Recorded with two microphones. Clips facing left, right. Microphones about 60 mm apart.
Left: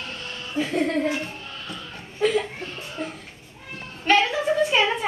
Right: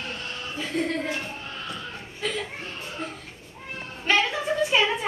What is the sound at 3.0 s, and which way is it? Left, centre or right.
Children playing, centre.